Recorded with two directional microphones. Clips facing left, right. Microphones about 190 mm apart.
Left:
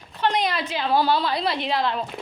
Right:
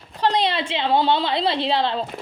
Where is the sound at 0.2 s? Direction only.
30° right (ahead or behind).